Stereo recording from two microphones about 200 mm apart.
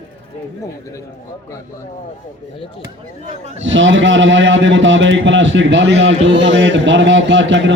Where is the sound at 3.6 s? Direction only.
70° right (ahead or behind).